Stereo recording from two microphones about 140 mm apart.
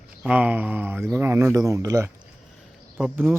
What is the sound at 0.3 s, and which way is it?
Speech, 10° right (ahead or behind).